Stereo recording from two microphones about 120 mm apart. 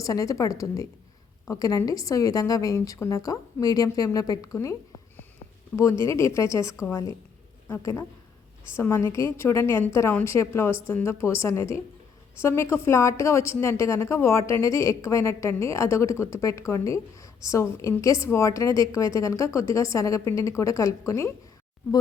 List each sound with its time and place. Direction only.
0.0 s a woman's voice: 30° left (ahead or behind)